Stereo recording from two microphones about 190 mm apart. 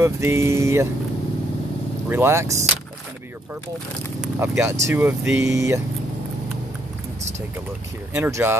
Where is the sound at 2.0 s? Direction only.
10° right (ahead or behind).